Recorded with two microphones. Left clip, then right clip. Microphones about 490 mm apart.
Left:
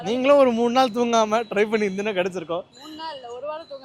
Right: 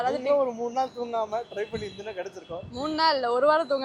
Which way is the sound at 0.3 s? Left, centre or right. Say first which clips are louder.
Left 12 dB; left.